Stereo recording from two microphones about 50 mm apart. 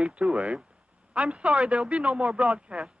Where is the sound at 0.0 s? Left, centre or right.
Right.